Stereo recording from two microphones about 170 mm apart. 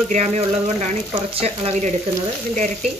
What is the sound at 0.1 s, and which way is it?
Speech, 40° right (ahead or behind).